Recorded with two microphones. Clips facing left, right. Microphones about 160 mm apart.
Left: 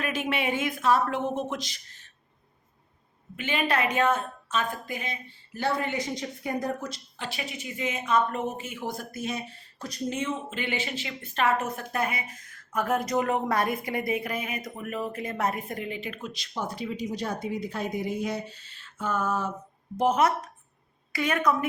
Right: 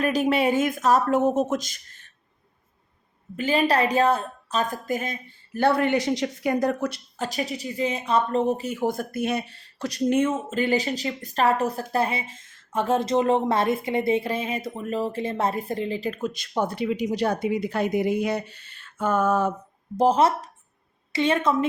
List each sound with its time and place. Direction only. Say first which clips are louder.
0.0 s speech: right 7 dB; 40° right (ahead or behind)
3.3 s speech: right 6 dB; 35° right (ahead or behind)
5.5 s speech: right 8 dB; 60° right (ahead or behind)
7.2 s speech: right 8 dB; 40° right (ahead or behind)
20.0 s a woman's voice: right 4 dB; 30° right (ahead or behind)